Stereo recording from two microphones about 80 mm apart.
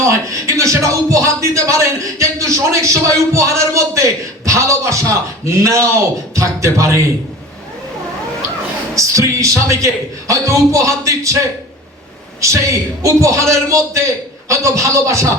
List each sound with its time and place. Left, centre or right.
0.0 s speech: right
9.0 s speech: right
12.4 s speech: right